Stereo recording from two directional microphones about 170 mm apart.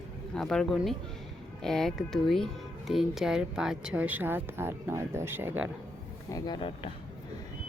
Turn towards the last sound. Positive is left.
turn(degrees=30)  # may be behind; listen again after turning